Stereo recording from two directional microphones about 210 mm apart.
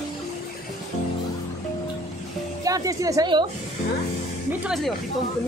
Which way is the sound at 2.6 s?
15° right (ahead or behind).